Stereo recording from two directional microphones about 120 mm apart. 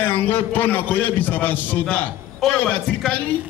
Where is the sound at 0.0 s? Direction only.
15° left (ahead or behind).